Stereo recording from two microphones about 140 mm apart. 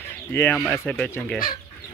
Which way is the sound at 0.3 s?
15° left (ahead or behind).